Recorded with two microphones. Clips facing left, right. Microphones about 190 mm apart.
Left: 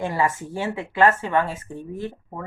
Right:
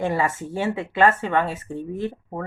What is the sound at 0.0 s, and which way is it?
Speech, 20° right (ahead or behind).